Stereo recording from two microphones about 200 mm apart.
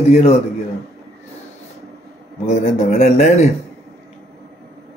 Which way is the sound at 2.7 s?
35° left (ahead or behind).